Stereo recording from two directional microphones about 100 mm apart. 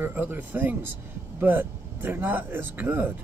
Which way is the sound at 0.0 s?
20° right (ahead or behind).